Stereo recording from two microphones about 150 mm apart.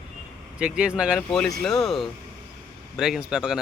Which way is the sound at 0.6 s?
5° right (ahead or behind).